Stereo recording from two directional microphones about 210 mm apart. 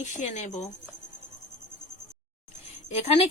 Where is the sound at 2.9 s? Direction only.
30° left (ahead or behind).